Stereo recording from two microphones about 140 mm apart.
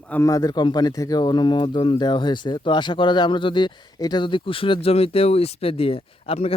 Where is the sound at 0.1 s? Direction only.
25° left (ahead or behind).